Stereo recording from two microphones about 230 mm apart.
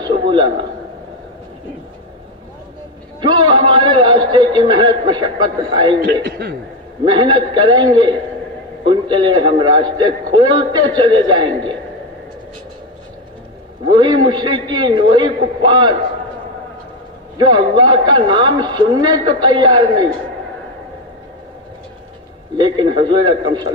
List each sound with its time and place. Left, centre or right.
0.3 s a man's voice: right
3.2 s a man's voice: centre
5.9 s a man's voice: right
7.1 s a man's voice: centre
13.8 s a man's voice: centre
17.4 s a man's voice: centre
22.6 s a man's voice: right